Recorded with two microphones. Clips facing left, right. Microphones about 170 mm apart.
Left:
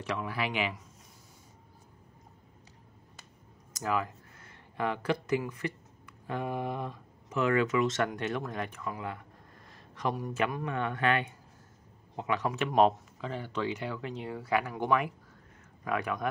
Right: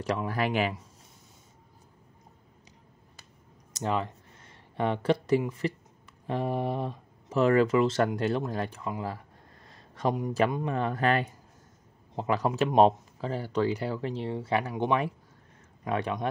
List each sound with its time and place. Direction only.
0.0 s speech: 40° right (ahead or behind)
3.7 s speech: 30° right (ahead or behind)
9.7 s a sound: 30° right (ahead or behind)
10.5 s a man's voice: 30° right (ahead or behind)